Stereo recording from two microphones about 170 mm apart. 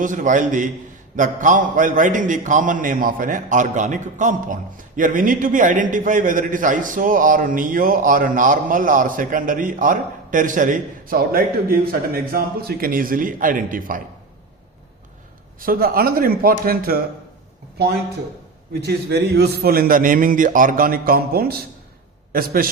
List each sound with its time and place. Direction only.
0.0 s a man's voice: 50° right (ahead or behind)
15.6 s a man's voice: 60° right (ahead or behind)
18.7 s a man's voice: 70° right (ahead or behind)